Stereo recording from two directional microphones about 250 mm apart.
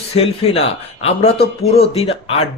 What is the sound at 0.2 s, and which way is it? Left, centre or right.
A man's voice, left.